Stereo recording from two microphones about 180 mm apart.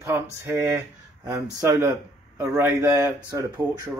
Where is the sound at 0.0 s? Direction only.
15° right (ahead or behind).